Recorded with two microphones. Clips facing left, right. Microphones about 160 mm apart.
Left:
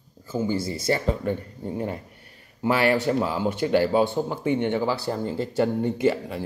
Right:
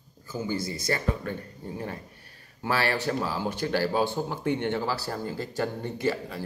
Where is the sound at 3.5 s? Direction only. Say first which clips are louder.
Left 7 dB; 20° left (ahead or behind).